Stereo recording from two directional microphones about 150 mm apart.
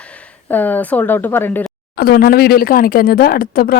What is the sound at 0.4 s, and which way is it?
Speech, 10° left (ahead or behind).